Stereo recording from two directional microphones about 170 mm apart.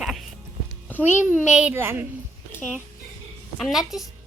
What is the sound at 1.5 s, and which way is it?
Speech, 5° right (ahead or behind).